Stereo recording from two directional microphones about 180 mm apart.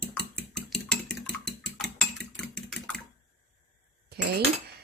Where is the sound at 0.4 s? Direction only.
5° left (ahead or behind).